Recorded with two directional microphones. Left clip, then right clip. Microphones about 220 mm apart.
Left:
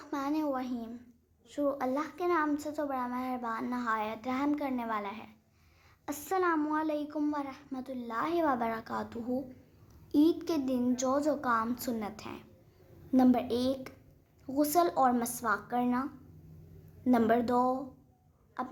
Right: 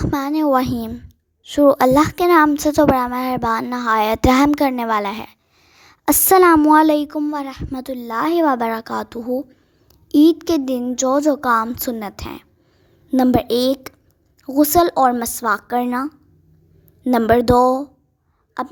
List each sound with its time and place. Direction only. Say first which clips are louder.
0.0 s a woman's voice: right 14 dB; 45° right (ahead or behind)